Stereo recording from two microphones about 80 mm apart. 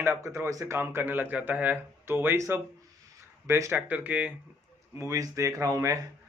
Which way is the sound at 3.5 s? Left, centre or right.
Right.